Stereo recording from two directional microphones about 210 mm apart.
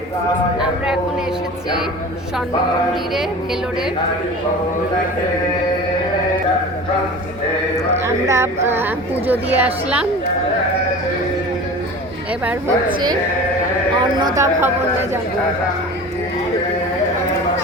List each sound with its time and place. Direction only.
8.0 s speech: 15° right (ahead or behind)
12.5 s speech: 15° right (ahead or behind)
14.3 s speech: 15° right (ahead or behind)